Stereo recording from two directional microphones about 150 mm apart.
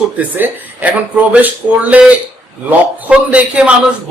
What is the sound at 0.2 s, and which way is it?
Speech, 10° right (ahead or behind).